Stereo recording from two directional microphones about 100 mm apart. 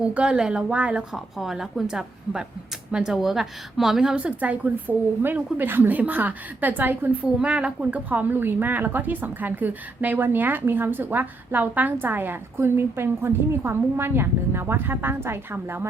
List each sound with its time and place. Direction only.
0.0 s a woman's voice: 10° right (ahead or behind)